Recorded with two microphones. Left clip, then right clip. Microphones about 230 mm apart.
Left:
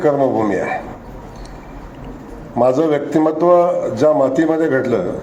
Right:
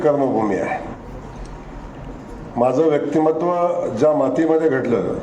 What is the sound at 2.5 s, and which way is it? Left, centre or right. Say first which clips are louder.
A man's voice: left 2 dB; left.